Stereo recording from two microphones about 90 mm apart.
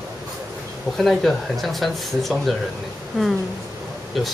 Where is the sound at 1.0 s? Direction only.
Centre (ahead or behind).